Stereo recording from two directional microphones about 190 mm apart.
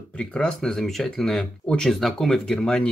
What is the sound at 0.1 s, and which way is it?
Speech, 5° left (ahead or behind).